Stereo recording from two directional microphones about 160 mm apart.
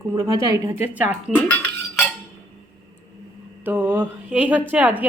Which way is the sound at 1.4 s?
10° left (ahead or behind).